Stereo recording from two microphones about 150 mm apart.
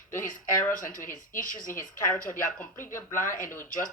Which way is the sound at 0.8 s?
65° left (ahead or behind).